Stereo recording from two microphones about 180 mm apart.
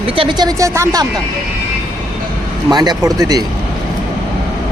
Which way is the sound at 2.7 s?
20° right (ahead or behind).